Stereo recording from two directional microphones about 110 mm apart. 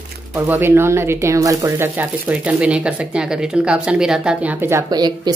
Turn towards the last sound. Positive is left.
turn(degrees=-40)  # may be behind; listen again after turning